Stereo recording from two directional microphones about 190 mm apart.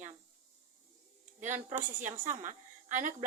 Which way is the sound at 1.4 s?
40° right (ahead or behind).